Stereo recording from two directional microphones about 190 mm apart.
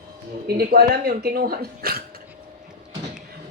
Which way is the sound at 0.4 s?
55° right (ahead or behind).